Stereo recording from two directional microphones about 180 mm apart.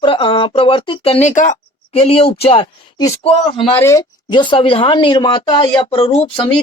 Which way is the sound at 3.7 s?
15° left (ahead or behind).